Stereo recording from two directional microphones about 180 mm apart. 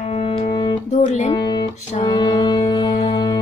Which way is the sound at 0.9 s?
40° left (ahead or behind).